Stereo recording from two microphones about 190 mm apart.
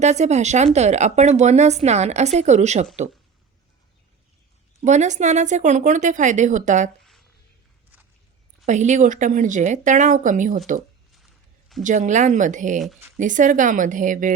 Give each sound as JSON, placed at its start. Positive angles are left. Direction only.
{"t": 0.0, "sound": "speech", "side_deg": -35}
{"t": 4.8, "sound": "speech", "side_deg": -40}
{"t": 7.0, "sound": "a sound", "side_deg": 0}
{"t": 8.6, "sound": "speech", "side_deg": -40}
{"t": 11.9, "sound": "a woman's voice", "side_deg": -40}